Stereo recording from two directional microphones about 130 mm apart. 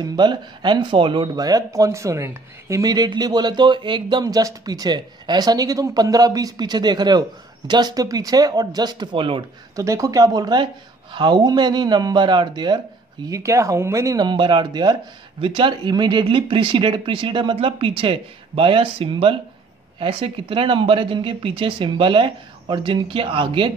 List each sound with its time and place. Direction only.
0.0 s speech: 35° right (ahead or behind)
9.8 s speech: 25° right (ahead or behind)
13.3 s speech: 25° right (ahead or behind); by 23.7 s 40° right (ahead or behind)